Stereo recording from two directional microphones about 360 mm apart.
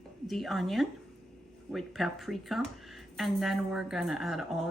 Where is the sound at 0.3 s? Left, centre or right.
Centre.